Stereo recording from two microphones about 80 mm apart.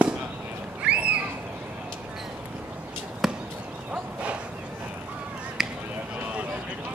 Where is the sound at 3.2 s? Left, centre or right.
Centre.